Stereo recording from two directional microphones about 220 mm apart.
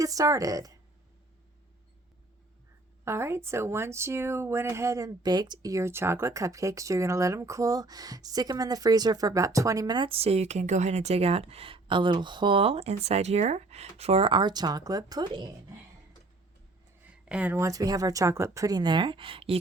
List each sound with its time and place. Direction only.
0.0 s speech: 15° right (ahead or behind)
3.0 s speech: 10° right (ahead or behind)
17.1 s speech: 5° right (ahead or behind); by 19.5 s 25° right (ahead or behind)